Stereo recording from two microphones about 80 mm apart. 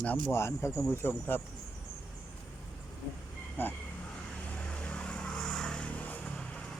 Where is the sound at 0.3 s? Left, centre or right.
Left.